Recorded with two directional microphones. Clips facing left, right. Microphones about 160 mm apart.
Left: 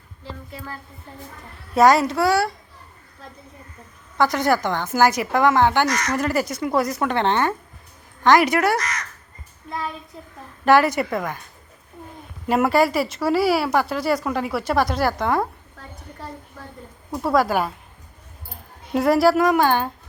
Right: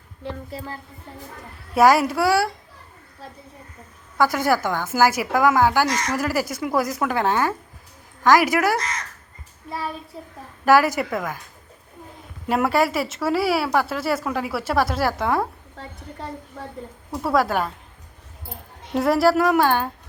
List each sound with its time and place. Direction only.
0.2 s a woman's voice: 65° right (ahead or behind)
1.7 s a woman's voice: 5° right (ahead or behind)
4.2 s a woman's voice: 5° right (ahead or behind)
8.8 s speech: 25° right (ahead or behind)
9.6 s a woman's voice: 5° right (ahead or behind)
12.5 s a woman's voice: centre (ahead or behind)
17.2 s a woman's voice: centre (ahead or behind)
18.9 s a woman's voice: centre (ahead or behind)